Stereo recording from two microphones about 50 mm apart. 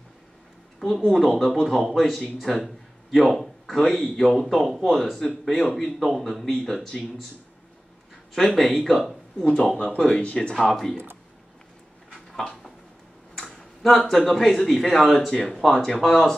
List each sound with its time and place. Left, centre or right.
0.7 s speech: centre
8.5 s speech: centre; by 10.5 s left
10.5 s speech: centre
12.4 s a sound: centre
13.4 s speech: centre